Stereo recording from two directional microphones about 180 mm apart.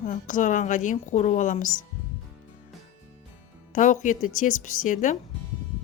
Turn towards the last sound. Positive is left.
turn(degrees=45)  # may be behind; listen again after turning